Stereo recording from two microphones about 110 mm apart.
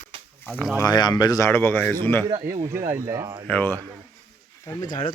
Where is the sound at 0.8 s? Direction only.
40° left (ahead or behind).